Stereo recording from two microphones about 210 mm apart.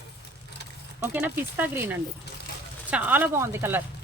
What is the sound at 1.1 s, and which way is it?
Speech, 10° right (ahead or behind).